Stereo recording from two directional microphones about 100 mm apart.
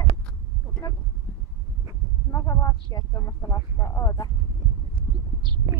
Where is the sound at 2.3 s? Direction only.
35° left (ahead or behind).